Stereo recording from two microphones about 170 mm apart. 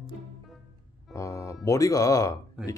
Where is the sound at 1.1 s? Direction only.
15° left (ahead or behind).